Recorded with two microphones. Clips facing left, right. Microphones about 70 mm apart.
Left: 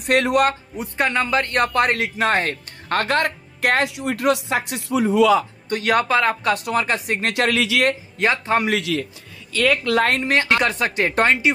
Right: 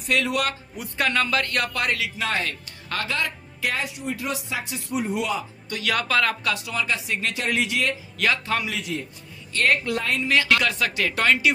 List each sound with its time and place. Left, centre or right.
0.0 s a man's voice: left
0.7 s a man's voice: left
5.7 s speech: left
6.5 s a man's voice: left
7.3 s speech: left
8.2 s speech: left
8.6 s speech: left
9.8 s speech: left
10.1 s speech: left